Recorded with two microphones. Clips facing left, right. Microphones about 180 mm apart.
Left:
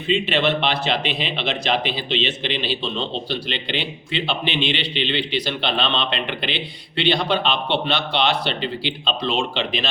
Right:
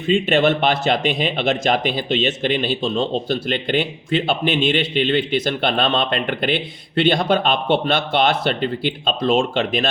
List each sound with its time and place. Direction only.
0.1 s speech: 50° right (ahead or behind)